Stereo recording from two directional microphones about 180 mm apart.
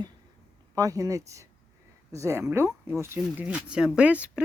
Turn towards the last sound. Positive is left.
turn(degrees=-5)  # may be behind; listen again after turning